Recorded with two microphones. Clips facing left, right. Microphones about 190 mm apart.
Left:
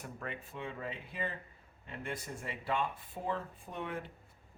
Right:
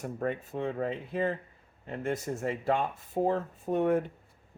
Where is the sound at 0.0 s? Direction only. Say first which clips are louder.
Right 11 dB; 40° right (ahead or behind).